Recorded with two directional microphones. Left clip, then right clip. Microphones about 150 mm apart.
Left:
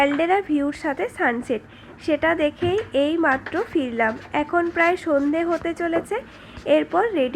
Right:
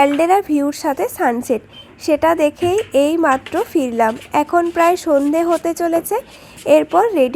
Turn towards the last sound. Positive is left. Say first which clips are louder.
# right 7 dB
turn(degrees=-45)  # may be behind; listen again after turning